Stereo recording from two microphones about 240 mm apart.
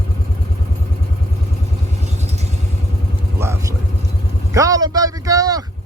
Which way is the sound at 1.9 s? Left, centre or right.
Right.